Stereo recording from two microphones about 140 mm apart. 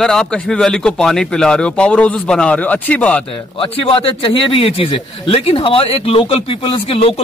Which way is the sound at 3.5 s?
40° left (ahead or behind).